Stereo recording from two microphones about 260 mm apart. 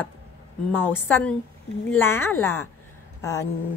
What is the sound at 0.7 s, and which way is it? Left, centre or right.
A woman's voice, centre.